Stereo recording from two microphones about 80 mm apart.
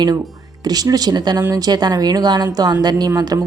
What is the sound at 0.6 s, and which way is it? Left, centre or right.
A woman's voice, right.